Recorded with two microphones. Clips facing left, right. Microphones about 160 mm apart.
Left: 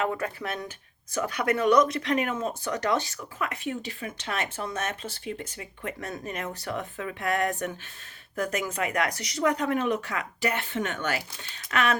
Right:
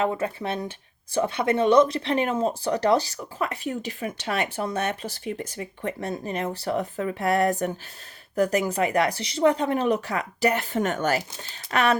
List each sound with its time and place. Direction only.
0.0 s speech: 25° right (ahead or behind)